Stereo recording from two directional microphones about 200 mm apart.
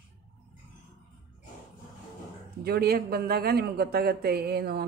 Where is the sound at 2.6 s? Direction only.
50° right (ahead or behind).